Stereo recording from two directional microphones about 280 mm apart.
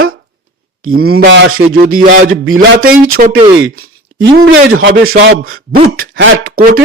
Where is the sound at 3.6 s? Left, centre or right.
Right.